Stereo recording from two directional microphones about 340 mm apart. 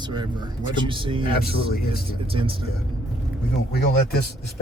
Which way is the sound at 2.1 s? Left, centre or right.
Centre.